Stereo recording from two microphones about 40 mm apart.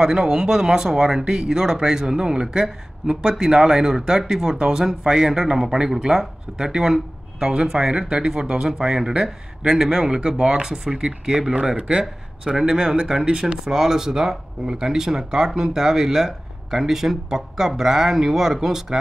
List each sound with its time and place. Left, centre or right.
0.0 s speech: centre